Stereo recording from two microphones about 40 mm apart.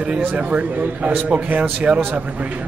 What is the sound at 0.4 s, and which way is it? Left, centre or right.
Speech, right.